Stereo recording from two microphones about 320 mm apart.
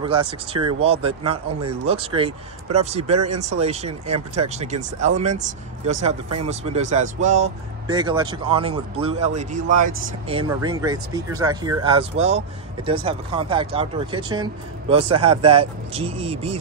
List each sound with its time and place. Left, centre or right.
0.0 s speech: centre